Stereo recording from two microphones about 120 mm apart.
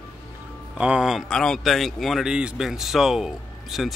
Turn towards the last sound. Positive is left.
turn(degrees=0)  # may be behind; listen again after turning